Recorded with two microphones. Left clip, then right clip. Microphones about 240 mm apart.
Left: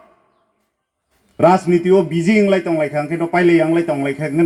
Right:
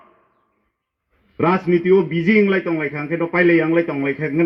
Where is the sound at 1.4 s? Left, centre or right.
Left.